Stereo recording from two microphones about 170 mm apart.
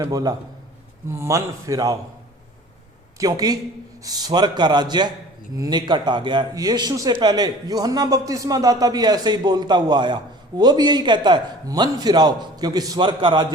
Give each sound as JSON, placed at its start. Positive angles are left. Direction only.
{"t": 0.0, "sound": "a man's voice", "side_deg": -20}
{"t": 3.2, "sound": "a man's voice", "side_deg": -20}